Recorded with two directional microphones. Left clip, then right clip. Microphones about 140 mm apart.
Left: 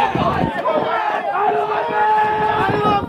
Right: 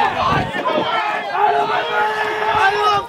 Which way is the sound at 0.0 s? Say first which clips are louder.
Right 1 dB; 40° right (ahead or behind).